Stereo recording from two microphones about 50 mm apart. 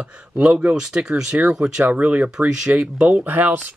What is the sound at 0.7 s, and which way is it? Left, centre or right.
Speech, centre.